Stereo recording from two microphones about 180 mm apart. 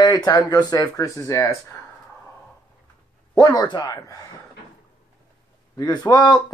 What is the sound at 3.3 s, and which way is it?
Speech, 20° left (ahead or behind).